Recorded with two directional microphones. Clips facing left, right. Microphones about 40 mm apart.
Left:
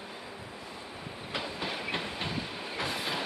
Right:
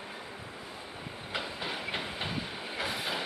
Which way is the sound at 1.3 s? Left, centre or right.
Centre.